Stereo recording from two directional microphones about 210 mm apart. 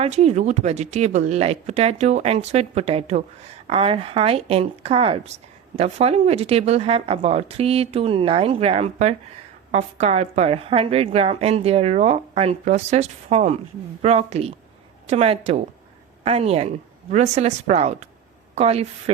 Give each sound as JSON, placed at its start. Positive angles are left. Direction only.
{"t": 0.0, "sound": "a woman's voice", "side_deg": -30}